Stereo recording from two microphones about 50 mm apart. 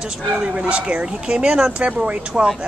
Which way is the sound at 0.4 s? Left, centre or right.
Right.